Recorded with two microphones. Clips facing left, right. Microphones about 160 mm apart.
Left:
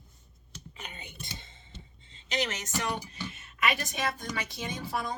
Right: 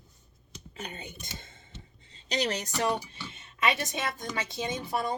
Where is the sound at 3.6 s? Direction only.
25° right (ahead or behind).